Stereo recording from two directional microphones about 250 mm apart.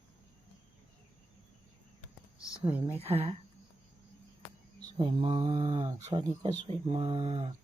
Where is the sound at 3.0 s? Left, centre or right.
Right.